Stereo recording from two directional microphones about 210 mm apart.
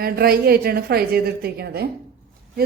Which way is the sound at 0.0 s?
45° right (ahead or behind).